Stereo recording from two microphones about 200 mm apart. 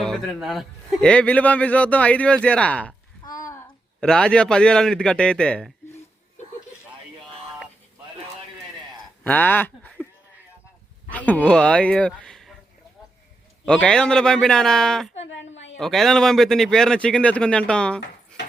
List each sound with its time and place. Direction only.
0.0 s a man's voice: centre (ahead or behind)
4.0 s a man's voice: 5° left (ahead or behind)
9.2 s a sound: 10° left (ahead or behind)
11.1 s speech: 5° left (ahead or behind)
13.7 s a man's voice: 5° left (ahead or behind)
15.3 s a sound: 65° left (ahead or behind)
15.8 s a man's voice: centre (ahead or behind)